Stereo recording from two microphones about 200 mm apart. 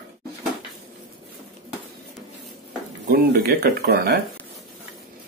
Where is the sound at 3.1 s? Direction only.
55° right (ahead or behind).